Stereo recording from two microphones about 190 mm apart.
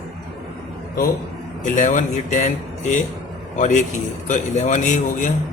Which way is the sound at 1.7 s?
40° left (ahead or behind).